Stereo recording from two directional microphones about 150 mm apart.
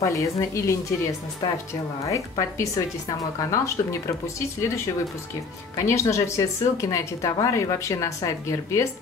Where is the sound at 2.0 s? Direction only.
20° left (ahead or behind).